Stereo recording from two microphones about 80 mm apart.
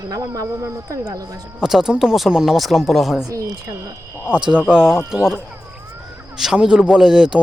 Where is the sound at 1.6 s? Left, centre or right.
Centre.